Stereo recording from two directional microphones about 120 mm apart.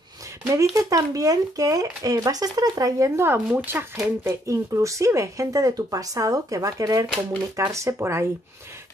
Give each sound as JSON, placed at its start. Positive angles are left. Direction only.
{"t": 0.5, "sound": "speech", "side_deg": -25}